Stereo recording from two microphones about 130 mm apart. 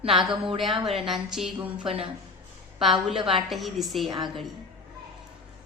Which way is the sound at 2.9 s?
40° right (ahead or behind).